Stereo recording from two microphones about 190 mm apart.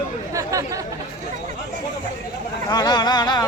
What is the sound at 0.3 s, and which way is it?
Chatter, 15° right (ahead or behind).